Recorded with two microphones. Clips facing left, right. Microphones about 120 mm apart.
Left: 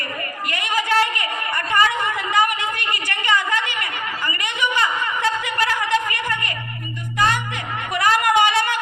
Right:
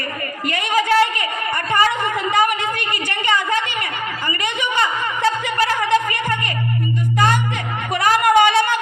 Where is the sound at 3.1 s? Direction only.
25° right (ahead or behind).